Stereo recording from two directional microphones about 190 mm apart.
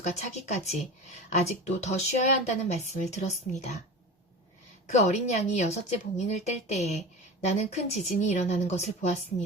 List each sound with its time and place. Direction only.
0.0 s a woman's voice: 35° left (ahead or behind)
4.9 s a woman's voice: 35° left (ahead or behind)